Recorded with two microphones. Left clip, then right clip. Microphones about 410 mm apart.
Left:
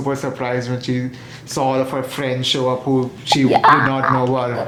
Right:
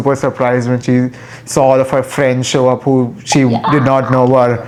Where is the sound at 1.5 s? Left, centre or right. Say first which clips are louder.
Right 9 dB; right.